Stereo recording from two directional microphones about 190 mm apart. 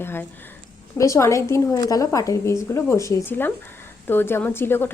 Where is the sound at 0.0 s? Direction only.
10° left (ahead or behind).